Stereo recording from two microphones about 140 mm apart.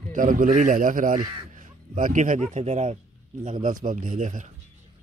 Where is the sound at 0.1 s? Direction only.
75° right (ahead or behind); by 3.0 s 55° right (ahead or behind).